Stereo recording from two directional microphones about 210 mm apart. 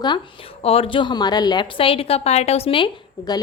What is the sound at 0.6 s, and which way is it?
A woman's voice, 25° left (ahead or behind).